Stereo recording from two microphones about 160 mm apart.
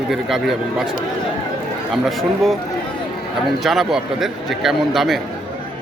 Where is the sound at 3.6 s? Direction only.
Centre (ahead or behind).